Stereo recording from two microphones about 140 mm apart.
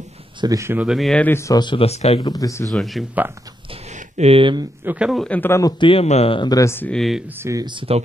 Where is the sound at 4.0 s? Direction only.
50° right (ahead or behind).